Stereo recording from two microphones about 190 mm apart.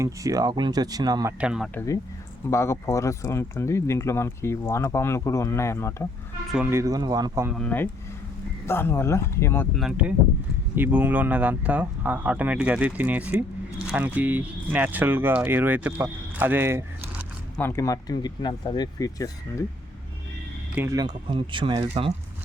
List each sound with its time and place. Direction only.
0.0 s speech: 15° right (ahead or behind)
1.4 s speech: 5° right (ahead or behind)
1.7 s speech: 15° left (ahead or behind)
6.5 s speech: 10° right (ahead or behind)
7.5 s speech: 5° left (ahead or behind)
9.7 s speech: 5° right (ahead or behind)
17.6 s speech: 15° left (ahead or behind)
20.7 s speech: 15° right (ahead or behind)